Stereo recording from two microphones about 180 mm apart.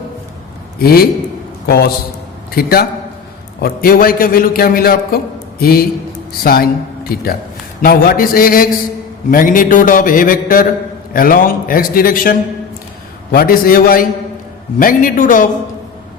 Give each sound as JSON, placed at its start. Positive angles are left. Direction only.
{"t": 0.8, "sound": "a man's voice", "side_deg": 55}
{"t": 7.8, "sound": "mantra", "side_deg": 55}